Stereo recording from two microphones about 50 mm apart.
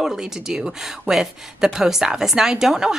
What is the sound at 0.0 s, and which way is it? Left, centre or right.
A woman's voice, centre.